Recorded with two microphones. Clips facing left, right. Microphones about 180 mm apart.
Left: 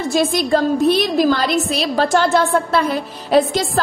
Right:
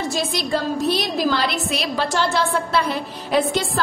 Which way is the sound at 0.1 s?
50° left (ahead or behind).